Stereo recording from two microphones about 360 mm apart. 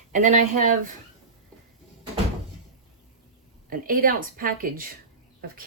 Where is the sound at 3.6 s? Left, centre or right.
Right.